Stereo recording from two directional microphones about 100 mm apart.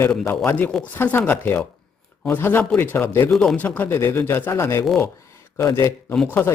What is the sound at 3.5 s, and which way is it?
Speech, 15° left (ahead or behind).